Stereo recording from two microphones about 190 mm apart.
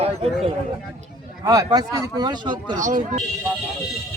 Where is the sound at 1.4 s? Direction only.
20° right (ahead or behind).